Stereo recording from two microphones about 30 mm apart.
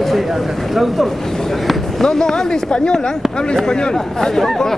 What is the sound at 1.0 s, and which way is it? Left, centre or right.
Speech, centre.